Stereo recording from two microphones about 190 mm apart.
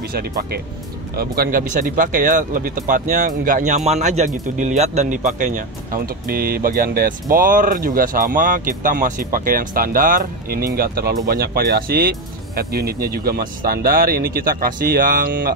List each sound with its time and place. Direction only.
0.1 s speech: 50° right (ahead or behind)